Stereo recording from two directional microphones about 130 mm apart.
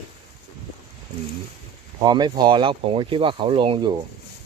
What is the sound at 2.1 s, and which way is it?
Speech, 35° right (ahead or behind).